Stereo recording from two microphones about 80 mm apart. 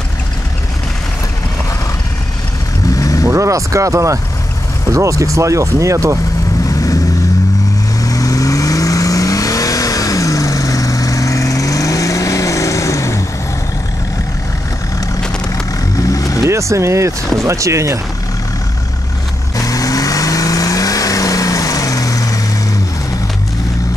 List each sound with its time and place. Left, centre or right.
3.0 s vehicle: left
3.3 s speech: right
8.0 s vehicle: left
16.0 s vehicle: left
16.4 s speech: right
19.5 s vehicle: left